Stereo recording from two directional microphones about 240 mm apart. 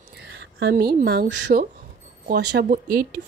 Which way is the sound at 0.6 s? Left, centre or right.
Right.